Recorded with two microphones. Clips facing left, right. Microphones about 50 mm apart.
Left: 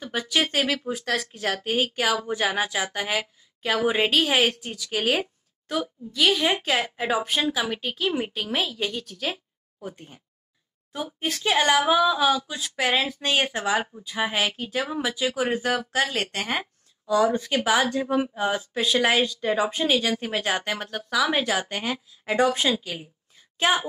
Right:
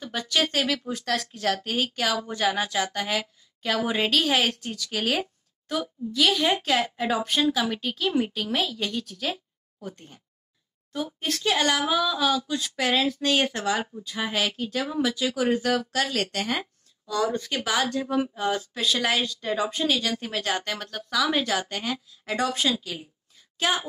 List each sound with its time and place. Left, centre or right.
0.0 s a woman's voice: centre
17.1 s a woman's voice: centre